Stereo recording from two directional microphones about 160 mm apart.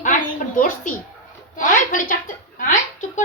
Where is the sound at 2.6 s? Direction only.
50° left (ahead or behind).